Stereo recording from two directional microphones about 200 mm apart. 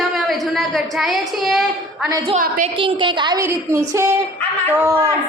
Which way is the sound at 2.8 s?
25° right (ahead or behind).